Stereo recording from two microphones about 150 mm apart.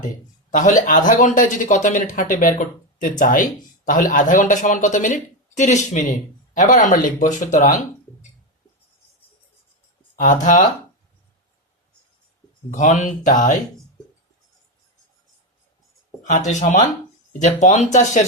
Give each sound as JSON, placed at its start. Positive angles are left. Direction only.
{"t": 0.5, "sound": "speech", "side_deg": 60}
{"t": 10.4, "sound": "speech", "side_deg": 60}
{"t": 12.7, "sound": "speech", "side_deg": 55}
{"t": 16.5, "sound": "speech", "side_deg": 55}